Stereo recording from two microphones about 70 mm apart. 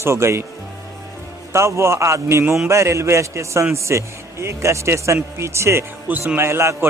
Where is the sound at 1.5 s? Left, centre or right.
Right.